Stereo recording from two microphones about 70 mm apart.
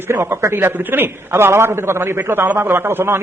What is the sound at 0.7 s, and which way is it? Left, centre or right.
A man's voice, right.